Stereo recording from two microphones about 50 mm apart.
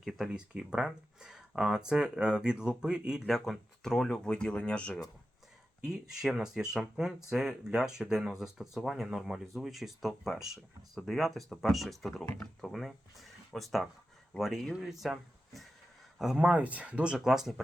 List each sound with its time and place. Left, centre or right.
0.0 s speech: centre
0.3 s speech: centre
3.2 s speech: centre; by 4.9 s left
5.8 s speech: centre
16.4 s speech: right
17.2 s speech: centre